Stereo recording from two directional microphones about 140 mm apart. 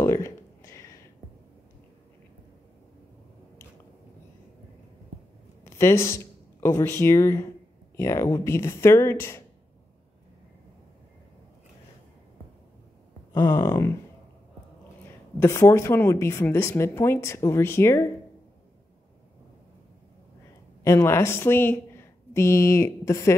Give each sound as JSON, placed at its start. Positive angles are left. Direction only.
{"t": 0.0, "sound": "a sound", "side_deg": 20}
{"t": 5.6, "sound": "a woman's voice", "side_deg": 20}
{"t": 13.3, "sound": "a woman's voice", "side_deg": 20}
{"t": 15.3, "sound": "a woman's voice", "side_deg": 20}
{"t": 20.8, "sound": "a woman's voice", "side_deg": 20}